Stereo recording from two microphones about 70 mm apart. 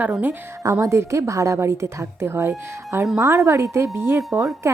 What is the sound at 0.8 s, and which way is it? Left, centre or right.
A woman's voice, right.